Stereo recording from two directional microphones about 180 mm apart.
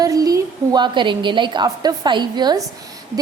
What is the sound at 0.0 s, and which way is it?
A woman's voice, 20° right (ahead or behind).